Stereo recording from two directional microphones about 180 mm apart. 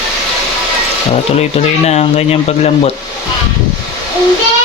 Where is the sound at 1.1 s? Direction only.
35° left (ahead or behind).